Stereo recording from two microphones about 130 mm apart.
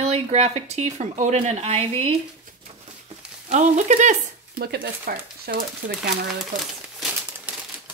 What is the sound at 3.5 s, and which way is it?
Speech, 70° right (ahead or behind).